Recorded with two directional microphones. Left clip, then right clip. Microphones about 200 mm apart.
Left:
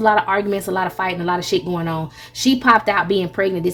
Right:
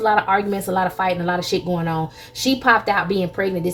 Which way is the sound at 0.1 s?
40° left (ahead or behind).